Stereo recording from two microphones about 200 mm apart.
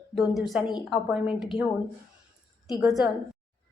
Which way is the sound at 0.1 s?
Centre (ahead or behind).